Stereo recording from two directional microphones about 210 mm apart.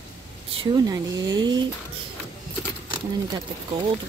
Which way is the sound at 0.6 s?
15° right (ahead or behind).